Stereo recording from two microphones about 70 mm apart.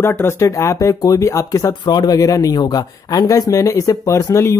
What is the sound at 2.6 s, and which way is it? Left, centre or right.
Speech, left.